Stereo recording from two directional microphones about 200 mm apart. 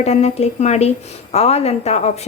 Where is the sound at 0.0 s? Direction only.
35° left (ahead or behind).